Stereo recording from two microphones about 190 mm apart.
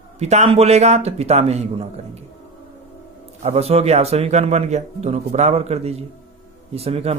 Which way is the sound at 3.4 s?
35° right (ahead or behind).